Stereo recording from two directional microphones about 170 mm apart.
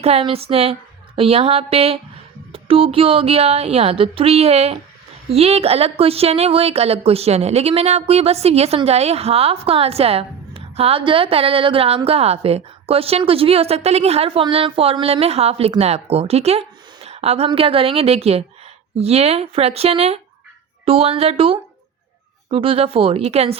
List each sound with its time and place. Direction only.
0.0 s a woman's voice: 35° right (ahead or behind)